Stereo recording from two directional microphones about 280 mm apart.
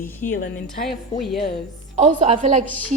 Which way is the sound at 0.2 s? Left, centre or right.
Left.